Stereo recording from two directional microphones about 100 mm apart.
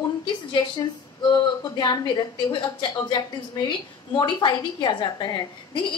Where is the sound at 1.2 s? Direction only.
45° left (ahead or behind).